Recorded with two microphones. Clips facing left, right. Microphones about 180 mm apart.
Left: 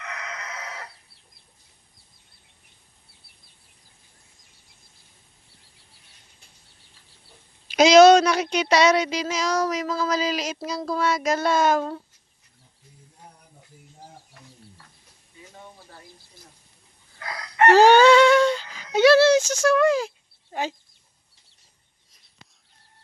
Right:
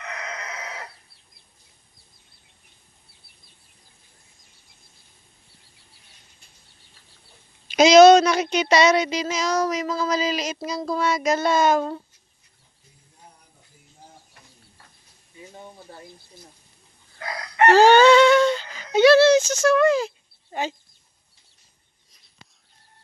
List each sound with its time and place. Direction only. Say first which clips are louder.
7.8 s speech: right 1 dB; 10° left (ahead or behind)
15.5 s a sound: right 3 dB; 20° right (ahead or behind)
17.7 s speech: even; 15° left (ahead or behind)